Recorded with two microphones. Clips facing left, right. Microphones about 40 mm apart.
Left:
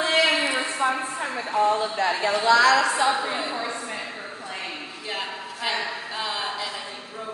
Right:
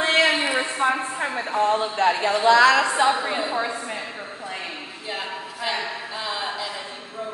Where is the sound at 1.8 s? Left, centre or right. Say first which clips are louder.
Right 3 dB; right.